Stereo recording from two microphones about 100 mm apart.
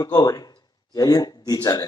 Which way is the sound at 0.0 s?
40° left (ahead or behind).